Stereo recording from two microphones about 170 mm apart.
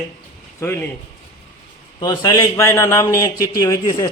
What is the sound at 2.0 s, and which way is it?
A man's voice, 20° left (ahead or behind).